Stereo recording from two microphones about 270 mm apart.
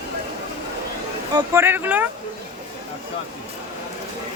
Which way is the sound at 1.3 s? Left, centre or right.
Centre.